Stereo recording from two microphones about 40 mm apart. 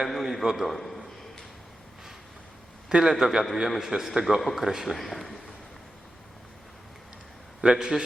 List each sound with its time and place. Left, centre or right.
0.0 s a man's voice: centre
0.4 s a sound: centre
2.9 s a man's voice: centre
4.9 s a man's voice: centre
7.6 s a man's voice: centre